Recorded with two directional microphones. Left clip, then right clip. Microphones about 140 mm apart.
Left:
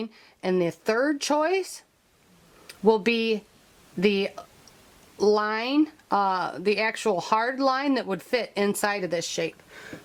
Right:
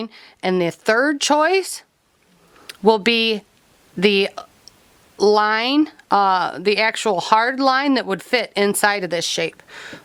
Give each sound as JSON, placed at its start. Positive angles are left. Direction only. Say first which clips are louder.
{"t": 0.0, "sound": "speech", "louder": "right 7 dB", "side_deg": -35}